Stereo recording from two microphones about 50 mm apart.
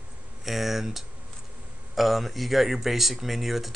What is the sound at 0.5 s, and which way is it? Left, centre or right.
Speech, centre.